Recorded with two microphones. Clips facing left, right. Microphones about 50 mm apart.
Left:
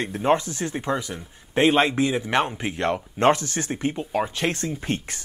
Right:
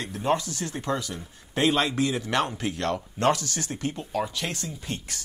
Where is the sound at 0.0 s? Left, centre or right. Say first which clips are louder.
Left 5 dB; left.